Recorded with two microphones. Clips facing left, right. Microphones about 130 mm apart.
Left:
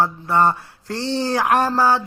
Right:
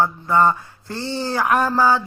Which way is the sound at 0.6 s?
80° left.